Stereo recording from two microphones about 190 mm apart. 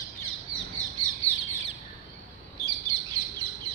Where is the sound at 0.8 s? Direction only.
20° right (ahead or behind).